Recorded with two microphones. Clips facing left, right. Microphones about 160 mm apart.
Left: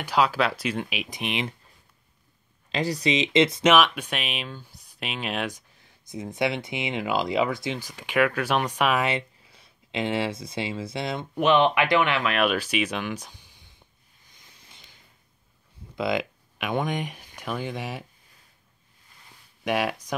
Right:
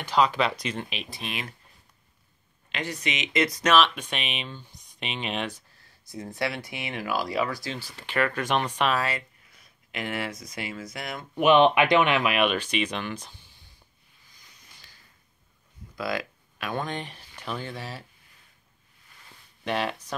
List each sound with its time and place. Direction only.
0.0 s speech: 10° left (ahead or behind)
2.7 s speech: 35° left (ahead or behind); by 5.5 s 5° left (ahead or behind)
5.5 s speech: 20° left (ahead or behind)
9.0 s speech: 25° left (ahead or behind)
11.4 s speech: 20° right (ahead or behind)
12.4 s speech: 5° left (ahead or behind)
14.7 s a sound: 20° left (ahead or behind)
16.0 s speech: 20° left (ahead or behind)
19.6 s speech: 10° left (ahead or behind)